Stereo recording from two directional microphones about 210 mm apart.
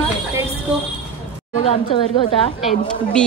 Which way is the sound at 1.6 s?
30° left (ahead or behind).